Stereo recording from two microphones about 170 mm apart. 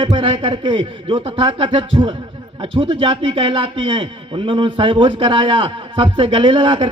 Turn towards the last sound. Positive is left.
turn(degrees=-30)  # may be behind; listen again after turning